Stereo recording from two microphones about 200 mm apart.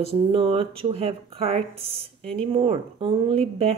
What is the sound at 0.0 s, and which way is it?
Speech, 30° right (ahead or behind).